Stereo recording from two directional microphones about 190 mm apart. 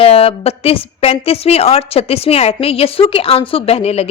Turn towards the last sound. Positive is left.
turn(degrees=30)  # may be behind; listen again after turning